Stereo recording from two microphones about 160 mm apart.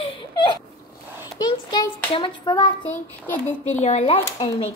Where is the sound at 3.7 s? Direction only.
45° left (ahead or behind).